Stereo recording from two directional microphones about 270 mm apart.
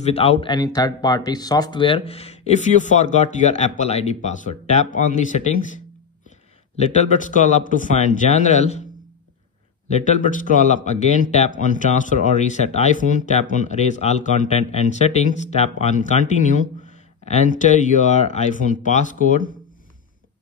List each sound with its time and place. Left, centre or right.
0.0 s speech: left
6.8 s speech: left
9.8 s speech: left